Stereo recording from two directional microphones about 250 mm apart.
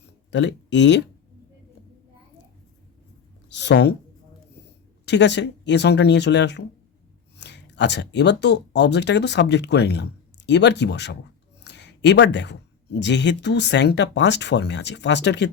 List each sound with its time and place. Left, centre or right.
0.3 s speech: left
3.5 s speech: left
5.0 s speech: left